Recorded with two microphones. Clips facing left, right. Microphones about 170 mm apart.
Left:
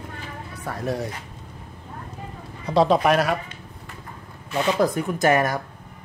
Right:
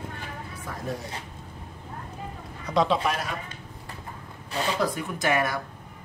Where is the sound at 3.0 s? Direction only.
70° left (ahead or behind).